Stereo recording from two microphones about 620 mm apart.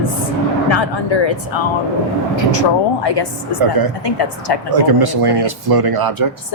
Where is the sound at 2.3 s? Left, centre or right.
Left.